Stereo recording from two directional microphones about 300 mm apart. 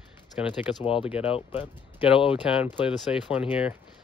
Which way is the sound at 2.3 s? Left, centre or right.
Centre.